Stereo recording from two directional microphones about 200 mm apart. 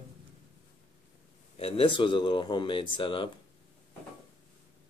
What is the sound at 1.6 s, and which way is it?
Speech, 25° left (ahead or behind).